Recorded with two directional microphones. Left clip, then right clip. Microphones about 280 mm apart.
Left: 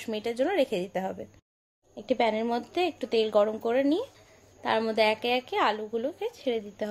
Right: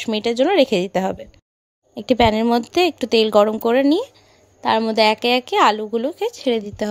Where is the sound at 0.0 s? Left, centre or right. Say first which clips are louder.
Right 10 dB; right.